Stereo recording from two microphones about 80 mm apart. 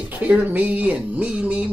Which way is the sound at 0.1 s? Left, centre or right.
Centre.